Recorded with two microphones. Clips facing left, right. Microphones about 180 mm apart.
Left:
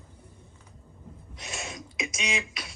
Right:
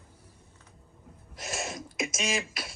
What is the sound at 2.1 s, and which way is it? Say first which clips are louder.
Beatboxing: right 1 dB; 40° right (ahead or behind).